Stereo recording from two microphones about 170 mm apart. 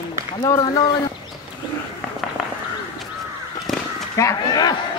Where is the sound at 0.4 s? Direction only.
25° left (ahead or behind).